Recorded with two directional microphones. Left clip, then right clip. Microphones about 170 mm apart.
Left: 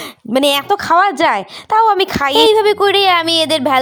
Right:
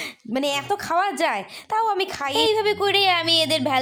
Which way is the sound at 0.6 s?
35° left (ahead or behind).